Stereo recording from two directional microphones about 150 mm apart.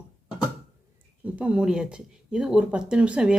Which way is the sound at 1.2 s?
10° right (ahead or behind).